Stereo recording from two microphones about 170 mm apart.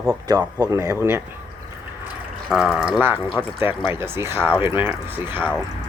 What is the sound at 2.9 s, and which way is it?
Speech, 10° right (ahead or behind).